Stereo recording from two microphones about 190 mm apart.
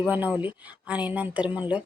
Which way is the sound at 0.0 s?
10° right (ahead or behind).